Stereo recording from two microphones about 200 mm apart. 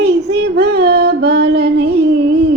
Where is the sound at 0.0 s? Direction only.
55° right (ahead or behind).